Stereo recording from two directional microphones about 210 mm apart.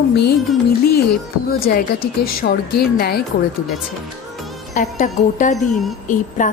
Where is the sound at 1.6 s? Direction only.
45° left (ahead or behind).